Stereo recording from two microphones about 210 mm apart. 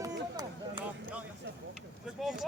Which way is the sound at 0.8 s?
5° right (ahead or behind).